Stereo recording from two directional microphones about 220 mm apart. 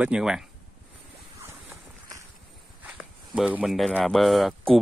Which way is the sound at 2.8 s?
5° right (ahead or behind).